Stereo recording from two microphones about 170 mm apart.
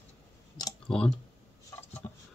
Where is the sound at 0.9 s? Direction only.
5° left (ahead or behind).